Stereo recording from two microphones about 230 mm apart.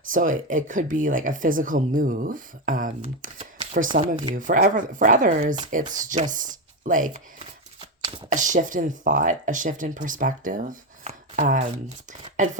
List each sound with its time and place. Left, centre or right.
0.1 s speech: right